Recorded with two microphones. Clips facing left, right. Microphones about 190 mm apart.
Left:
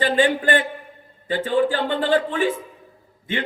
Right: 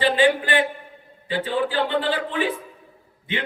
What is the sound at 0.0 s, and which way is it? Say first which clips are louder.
A man's voice: even; 45° left (ahead or behind).